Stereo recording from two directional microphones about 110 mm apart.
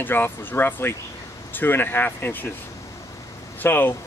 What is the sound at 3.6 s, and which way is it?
Speech, 20° left (ahead or behind).